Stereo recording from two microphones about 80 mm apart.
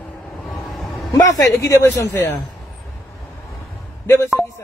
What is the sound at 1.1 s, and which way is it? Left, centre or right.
A man's voice, left.